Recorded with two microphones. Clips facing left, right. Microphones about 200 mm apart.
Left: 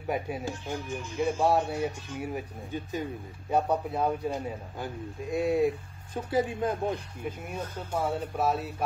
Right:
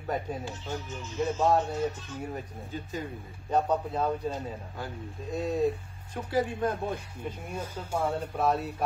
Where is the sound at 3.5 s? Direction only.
10° left (ahead or behind).